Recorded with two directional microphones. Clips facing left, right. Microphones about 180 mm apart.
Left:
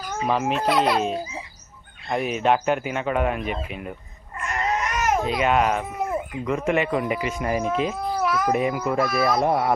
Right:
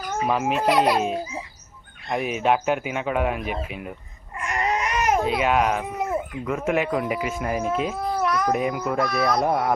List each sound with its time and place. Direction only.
0.3 s speech: 5° right (ahead or behind)
4.4 s baby cry: 15° right (ahead or behind)
5.2 s speech: 5° right (ahead or behind)